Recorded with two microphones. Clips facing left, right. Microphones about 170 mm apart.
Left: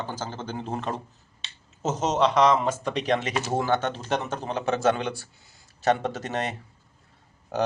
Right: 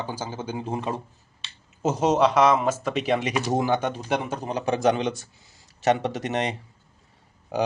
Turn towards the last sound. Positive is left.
turn(degrees=-10)  # may be behind; listen again after turning